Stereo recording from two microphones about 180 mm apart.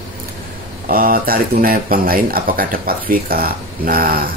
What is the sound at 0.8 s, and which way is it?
Speech, 55° right (ahead or behind).